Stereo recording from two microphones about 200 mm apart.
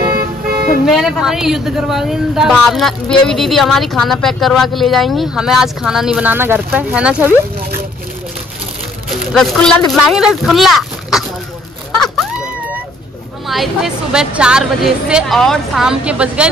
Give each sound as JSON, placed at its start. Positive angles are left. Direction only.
{"t": 0.0, "sound": "toot", "side_deg": -50}
{"t": 0.8, "sound": "speech", "side_deg": 0}
{"t": 9.3, "sound": "speech", "side_deg": 0}
{"t": 12.0, "sound": "a sound", "side_deg": -5}
{"t": 13.5, "sound": "speech", "side_deg": 0}